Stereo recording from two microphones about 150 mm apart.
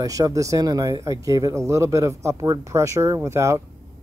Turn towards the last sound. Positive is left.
turn(degrees=-20)  # may be behind; listen again after turning